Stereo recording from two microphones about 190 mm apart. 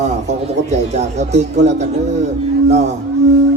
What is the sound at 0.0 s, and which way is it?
A man's voice, 35° right (ahead or behind).